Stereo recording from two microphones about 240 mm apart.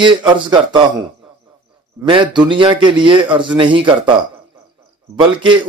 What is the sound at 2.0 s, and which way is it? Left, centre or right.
A man's voice, centre.